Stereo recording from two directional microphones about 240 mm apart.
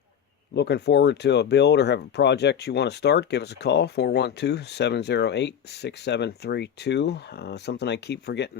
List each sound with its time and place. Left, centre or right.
0.5 s speech: left